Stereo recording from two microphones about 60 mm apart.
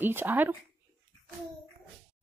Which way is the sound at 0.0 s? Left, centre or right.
Right.